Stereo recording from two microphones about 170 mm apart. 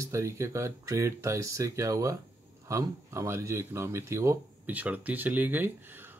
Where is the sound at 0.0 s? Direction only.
15° right (ahead or behind).